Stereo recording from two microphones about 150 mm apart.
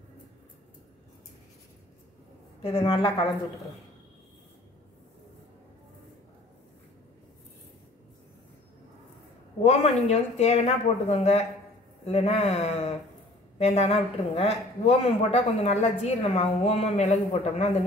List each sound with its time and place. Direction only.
2.6 s a woman's voice: 35° left (ahead or behind)
9.6 s speech: 45° left (ahead or behind)